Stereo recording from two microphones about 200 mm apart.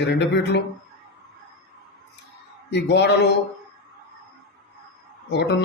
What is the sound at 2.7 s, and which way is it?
Speech, 60° left (ahead or behind).